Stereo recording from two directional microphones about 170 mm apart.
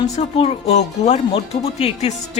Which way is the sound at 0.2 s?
40° left (ahead or behind).